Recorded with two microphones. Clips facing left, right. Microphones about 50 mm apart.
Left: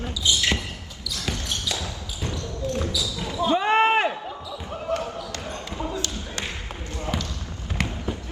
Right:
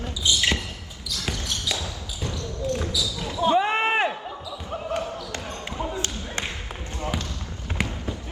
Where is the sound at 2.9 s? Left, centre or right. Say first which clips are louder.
Even; left.